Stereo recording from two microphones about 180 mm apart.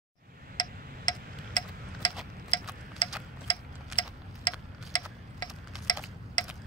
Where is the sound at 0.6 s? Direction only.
25° left (ahead or behind).